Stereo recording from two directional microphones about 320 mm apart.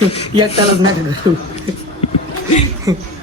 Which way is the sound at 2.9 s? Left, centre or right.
Centre.